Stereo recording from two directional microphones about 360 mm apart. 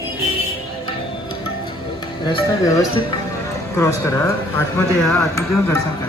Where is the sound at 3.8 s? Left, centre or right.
Centre.